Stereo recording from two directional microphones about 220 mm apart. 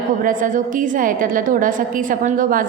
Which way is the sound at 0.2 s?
35° right (ahead or behind).